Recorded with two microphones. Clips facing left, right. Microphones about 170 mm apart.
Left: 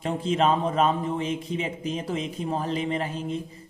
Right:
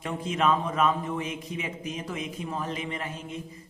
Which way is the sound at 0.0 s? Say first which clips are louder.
Left 3 dB; 30° left (ahead or behind).